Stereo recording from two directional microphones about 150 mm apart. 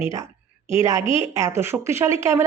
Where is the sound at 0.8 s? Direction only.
20° right (ahead or behind).